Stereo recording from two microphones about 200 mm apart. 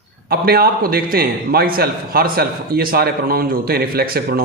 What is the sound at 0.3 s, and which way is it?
A man's voice, 50° right (ahead or behind).